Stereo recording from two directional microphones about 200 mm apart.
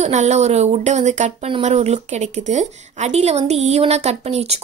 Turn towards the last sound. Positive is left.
turn(degrees=-30)  # may be behind; listen again after turning